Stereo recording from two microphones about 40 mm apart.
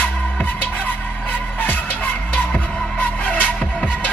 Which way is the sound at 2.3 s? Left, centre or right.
Left.